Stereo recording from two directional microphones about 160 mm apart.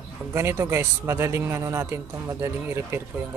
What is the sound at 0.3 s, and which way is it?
Speech, 15° right (ahead or behind).